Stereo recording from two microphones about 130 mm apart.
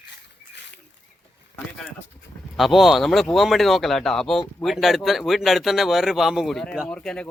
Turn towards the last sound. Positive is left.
turn(degrees=5)  # may be behind; listen again after turning